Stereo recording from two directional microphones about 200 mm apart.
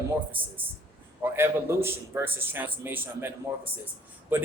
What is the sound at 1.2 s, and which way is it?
A man's voice, 10° right (ahead or behind).